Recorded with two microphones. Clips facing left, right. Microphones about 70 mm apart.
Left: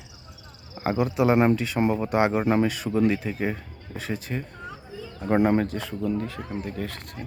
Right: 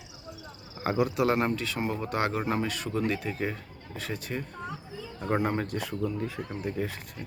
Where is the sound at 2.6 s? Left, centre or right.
Centre.